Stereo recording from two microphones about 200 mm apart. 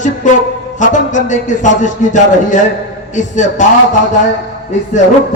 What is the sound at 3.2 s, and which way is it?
Speech, 40° left (ahead or behind).